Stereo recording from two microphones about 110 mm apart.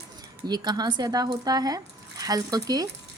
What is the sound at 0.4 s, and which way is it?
Speech, 40° right (ahead or behind).